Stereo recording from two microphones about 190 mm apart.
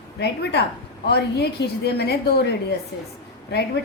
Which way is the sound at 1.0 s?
60° left (ahead or behind).